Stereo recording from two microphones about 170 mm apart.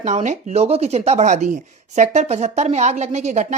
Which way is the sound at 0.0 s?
45° right (ahead or behind).